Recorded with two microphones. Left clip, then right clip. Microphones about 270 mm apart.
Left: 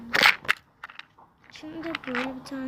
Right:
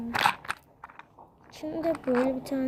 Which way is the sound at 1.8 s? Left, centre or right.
Centre.